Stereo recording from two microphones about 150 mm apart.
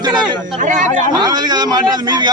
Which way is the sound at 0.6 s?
55° right (ahead or behind).